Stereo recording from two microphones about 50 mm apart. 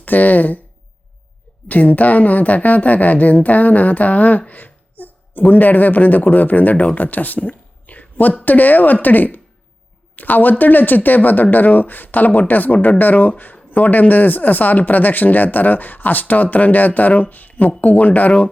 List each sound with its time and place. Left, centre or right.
0.0 s speech: left
1.6 s speech: left